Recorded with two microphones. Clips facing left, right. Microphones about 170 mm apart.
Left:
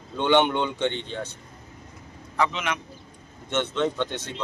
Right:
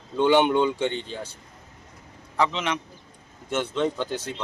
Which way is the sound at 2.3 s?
30° right (ahead or behind).